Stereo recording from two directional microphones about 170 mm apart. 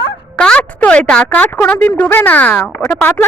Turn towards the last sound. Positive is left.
turn(degrees=5)  # may be behind; listen again after turning